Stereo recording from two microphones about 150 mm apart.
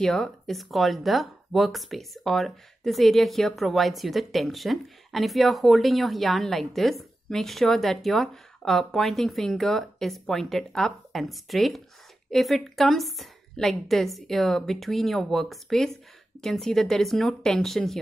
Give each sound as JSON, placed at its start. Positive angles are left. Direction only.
{"t": 0.0, "sound": "speech", "side_deg": 5}